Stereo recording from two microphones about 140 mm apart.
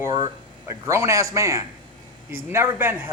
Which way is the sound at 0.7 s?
20° right (ahead or behind).